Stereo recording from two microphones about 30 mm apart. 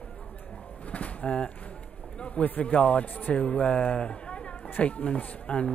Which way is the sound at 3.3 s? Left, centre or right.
Left.